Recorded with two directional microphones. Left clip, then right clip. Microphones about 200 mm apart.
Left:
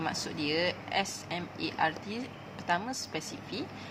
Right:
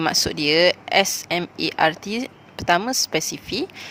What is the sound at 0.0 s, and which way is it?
Speech, 55° right (ahead or behind).